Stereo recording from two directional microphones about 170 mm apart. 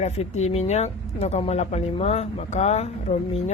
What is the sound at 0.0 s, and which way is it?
Speech, 40° left (ahead or behind).